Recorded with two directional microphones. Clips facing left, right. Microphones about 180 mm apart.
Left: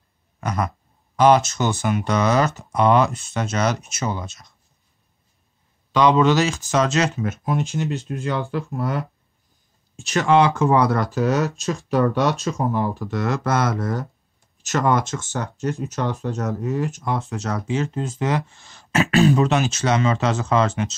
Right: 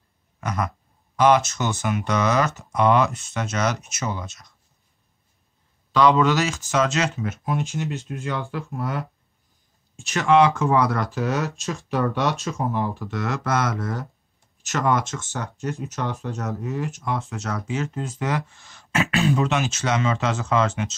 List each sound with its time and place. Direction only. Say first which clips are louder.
0.4 s a sound: left 2 dB; 35° left (ahead or behind)
1.1 s speech: left 2 dB; 30° left (ahead or behind)
5.9 s speech: left 2 dB; 20° left (ahead or behind); by 9.0 s 40° left (ahead or behind)
10.0 s speech: left 1 dB; 35° left (ahead or behind)